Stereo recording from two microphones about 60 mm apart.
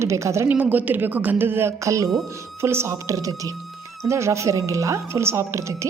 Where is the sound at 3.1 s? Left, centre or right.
Right.